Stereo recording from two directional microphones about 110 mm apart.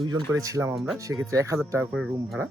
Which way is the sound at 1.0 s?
30° right (ahead or behind).